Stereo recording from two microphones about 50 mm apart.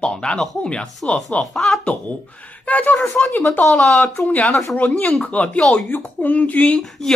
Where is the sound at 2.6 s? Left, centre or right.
Left.